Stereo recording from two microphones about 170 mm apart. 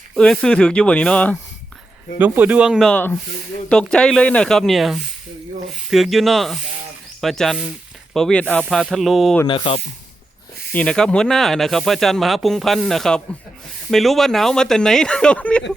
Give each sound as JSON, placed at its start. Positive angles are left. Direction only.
{"t": 0.2, "sound": "speech", "side_deg": 5}
{"t": 2.1, "sound": "speech", "side_deg": -10}
{"t": 2.9, "sound": "speech", "side_deg": 10}
{"t": 9.5, "sound": "speech", "side_deg": 30}
{"t": 10.7, "sound": "speech", "side_deg": 5}